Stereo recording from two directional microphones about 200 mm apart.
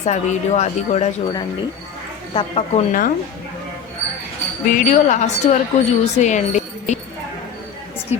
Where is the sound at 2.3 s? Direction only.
30° left (ahead or behind).